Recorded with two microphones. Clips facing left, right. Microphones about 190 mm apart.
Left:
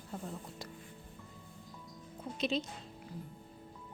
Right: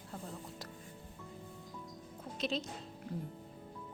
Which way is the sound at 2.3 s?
Centre (ahead or behind).